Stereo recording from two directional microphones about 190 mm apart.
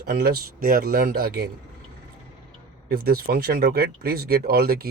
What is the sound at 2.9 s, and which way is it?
Speech, 55° right (ahead or behind).